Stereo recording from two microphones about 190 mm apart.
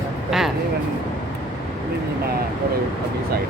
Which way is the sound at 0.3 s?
Centre (ahead or behind).